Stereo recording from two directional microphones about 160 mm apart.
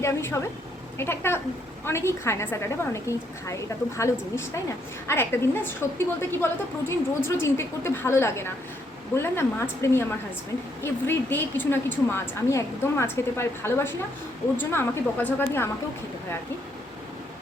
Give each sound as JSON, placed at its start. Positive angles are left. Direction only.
{"t": 0.0, "sound": "a woman's voice", "side_deg": 15}